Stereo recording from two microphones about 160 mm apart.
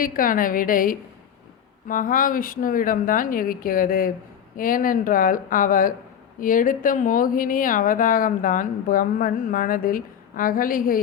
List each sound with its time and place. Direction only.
0.0 s speech: 60° left (ahead or behind)